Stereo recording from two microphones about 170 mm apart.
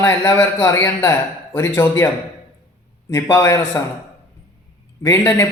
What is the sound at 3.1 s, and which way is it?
Speech, 15° left (ahead or behind).